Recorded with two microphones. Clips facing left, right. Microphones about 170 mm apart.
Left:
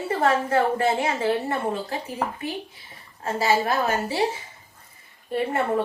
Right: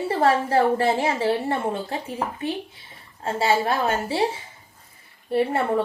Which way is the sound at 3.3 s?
30° right (ahead or behind).